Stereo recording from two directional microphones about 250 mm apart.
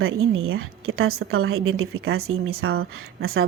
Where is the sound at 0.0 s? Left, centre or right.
Right.